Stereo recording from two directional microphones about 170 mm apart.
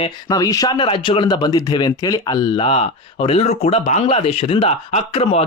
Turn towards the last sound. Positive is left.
turn(degrees=35)  # may be behind; listen again after turning